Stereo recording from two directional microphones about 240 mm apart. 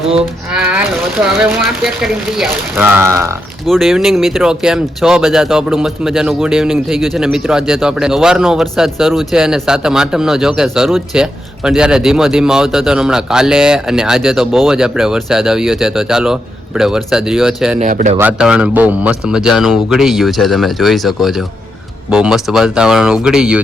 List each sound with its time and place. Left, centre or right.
0.5 s speech: centre
3.7 s speech: centre
17.7 s a man's voice: right
18.2 s speech: centre